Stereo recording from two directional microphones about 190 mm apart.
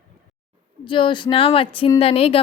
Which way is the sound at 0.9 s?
25° left (ahead or behind).